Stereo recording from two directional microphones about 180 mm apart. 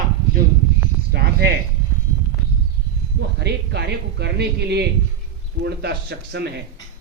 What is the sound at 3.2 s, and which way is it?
A man's voice, 65° right (ahead or behind).